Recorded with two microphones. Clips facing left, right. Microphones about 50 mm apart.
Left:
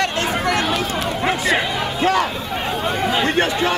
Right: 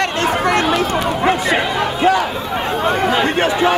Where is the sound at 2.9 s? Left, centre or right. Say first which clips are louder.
Right 5 dB; right.